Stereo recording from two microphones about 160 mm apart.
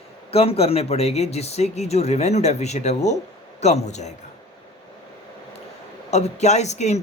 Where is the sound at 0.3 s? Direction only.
40° left (ahead or behind).